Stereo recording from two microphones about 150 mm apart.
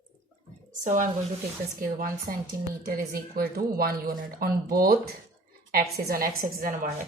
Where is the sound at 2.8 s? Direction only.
80° right.